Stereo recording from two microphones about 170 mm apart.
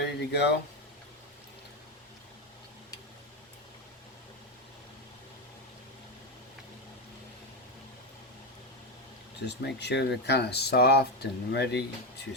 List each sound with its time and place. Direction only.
0.0 s speech: 80° left
9.5 s speech: 85° left